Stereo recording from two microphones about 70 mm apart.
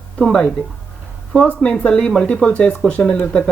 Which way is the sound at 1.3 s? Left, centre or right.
Centre.